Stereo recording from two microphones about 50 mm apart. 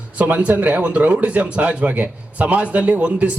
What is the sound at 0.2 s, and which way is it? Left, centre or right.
Speech, right.